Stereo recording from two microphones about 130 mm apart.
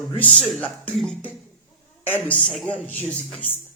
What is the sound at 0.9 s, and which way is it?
Cough, 5° left (ahead or behind).